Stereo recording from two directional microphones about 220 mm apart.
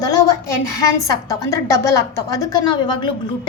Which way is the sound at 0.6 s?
15° left (ahead or behind).